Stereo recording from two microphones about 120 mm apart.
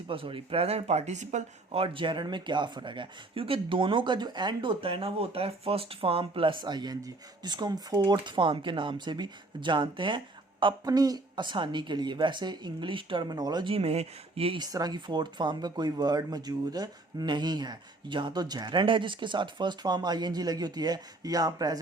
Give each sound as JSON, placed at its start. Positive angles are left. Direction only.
{"t": 0.1, "sound": "speech", "side_deg": -50}
{"t": 1.7, "sound": "speech", "side_deg": -50}
{"t": 13.7, "sound": "speech", "side_deg": -60}
{"t": 14.6, "sound": "speech", "side_deg": -35}